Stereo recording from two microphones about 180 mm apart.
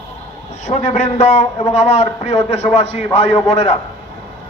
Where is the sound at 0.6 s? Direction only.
40° left (ahead or behind).